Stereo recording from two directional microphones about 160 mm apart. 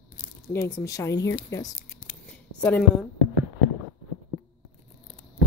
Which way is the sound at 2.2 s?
10° left (ahead or behind).